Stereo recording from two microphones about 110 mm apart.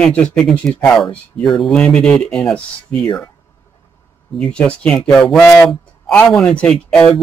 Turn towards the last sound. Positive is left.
turn(degrees=10)  # may be behind; listen again after turning